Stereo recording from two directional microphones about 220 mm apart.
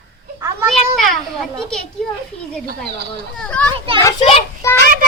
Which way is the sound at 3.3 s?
5° left (ahead or behind).